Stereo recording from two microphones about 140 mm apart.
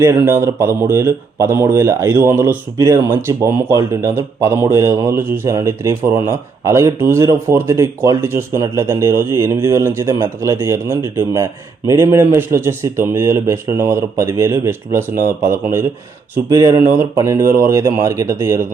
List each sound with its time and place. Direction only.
0.0 s speech: 20° right (ahead or behind)